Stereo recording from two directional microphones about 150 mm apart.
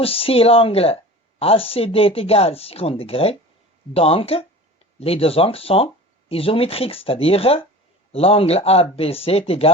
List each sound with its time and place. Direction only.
0.0 s speech: 40° left (ahead or behind)